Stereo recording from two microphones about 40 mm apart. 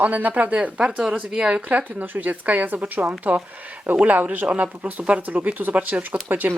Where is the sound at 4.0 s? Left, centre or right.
Right.